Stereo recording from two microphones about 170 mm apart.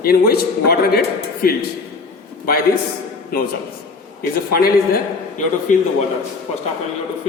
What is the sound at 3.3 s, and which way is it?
Speech, 60° left (ahead or behind).